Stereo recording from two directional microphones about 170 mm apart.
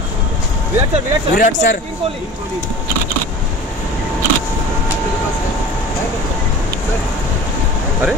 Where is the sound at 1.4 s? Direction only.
45° left (ahead or behind).